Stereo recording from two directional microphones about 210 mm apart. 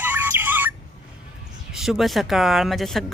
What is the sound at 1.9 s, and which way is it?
Speech, centre (ahead or behind).